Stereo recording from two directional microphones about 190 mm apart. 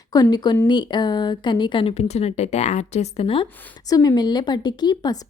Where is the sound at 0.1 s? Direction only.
20° left (ahead or behind).